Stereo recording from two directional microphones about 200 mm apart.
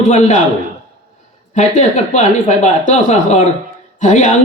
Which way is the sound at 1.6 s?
40° left (ahead or behind).